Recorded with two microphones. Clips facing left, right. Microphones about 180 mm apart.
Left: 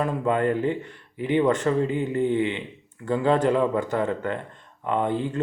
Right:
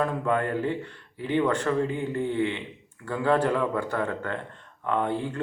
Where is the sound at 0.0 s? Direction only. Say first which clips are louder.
Left 3 dB; 20° left (ahead or behind).